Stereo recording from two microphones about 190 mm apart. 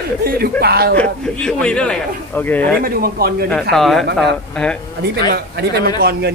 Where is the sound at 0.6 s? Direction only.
55° right (ahead or behind).